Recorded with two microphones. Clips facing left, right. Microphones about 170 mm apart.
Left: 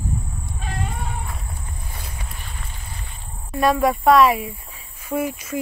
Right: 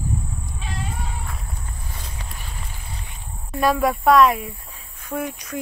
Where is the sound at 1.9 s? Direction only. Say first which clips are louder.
Right 1 dB; 10° left (ahead or behind).